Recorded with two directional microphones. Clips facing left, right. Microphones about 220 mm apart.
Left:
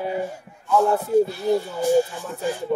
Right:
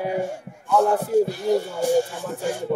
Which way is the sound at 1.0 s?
50° right (ahead or behind).